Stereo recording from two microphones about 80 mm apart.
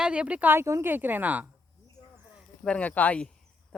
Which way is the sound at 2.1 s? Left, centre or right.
Centre.